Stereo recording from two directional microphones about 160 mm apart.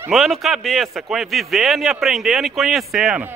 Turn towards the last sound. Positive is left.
turn(degrees=0)  # may be behind; listen again after turning